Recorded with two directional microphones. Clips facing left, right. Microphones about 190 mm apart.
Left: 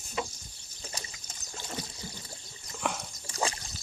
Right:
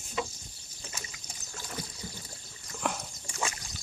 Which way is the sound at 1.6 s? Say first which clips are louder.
Left 1 dB; 25° left (ahead or behind).